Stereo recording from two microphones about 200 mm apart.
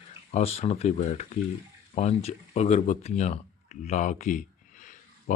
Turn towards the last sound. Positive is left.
turn(degrees=40)  # may be behind; listen again after turning